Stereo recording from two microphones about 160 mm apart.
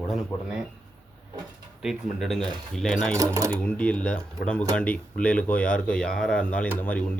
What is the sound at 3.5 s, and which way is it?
Speech, 10° left (ahead or behind).